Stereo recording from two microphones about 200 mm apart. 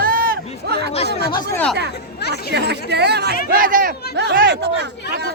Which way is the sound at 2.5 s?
55° right (ahead or behind).